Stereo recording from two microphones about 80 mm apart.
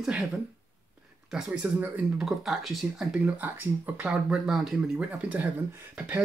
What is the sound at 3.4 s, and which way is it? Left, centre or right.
Speech, centre.